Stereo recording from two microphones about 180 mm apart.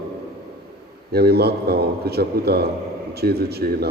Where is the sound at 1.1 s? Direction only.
60° right (ahead or behind).